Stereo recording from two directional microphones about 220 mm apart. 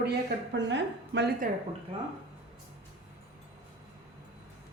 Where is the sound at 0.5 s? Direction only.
55° right (ahead or behind).